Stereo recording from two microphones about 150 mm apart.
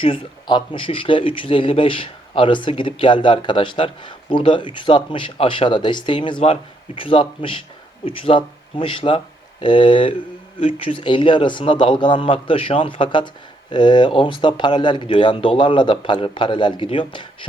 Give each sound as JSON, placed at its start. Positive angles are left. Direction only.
{"t": 0.0, "sound": "speech", "side_deg": 35}